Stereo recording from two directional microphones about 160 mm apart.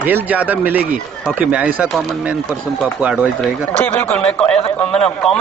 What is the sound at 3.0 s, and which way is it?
Speech, 10° right (ahead or behind).